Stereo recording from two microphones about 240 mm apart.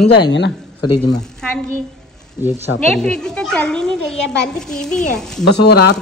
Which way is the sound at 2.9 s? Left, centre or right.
Centre.